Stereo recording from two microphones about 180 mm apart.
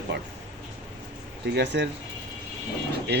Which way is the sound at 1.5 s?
75° right (ahead or behind).